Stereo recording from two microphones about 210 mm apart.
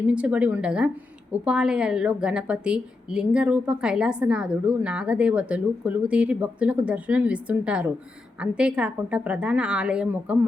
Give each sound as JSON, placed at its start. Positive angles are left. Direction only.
{"t": 0.1, "sound": "a woman's voice", "side_deg": -5}